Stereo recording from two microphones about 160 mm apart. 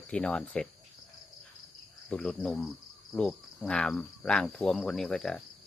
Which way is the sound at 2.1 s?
5° left (ahead or behind).